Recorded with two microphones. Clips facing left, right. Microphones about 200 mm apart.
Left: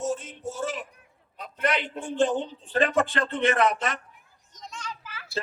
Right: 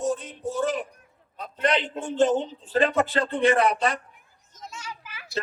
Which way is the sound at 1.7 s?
25° right (ahead or behind).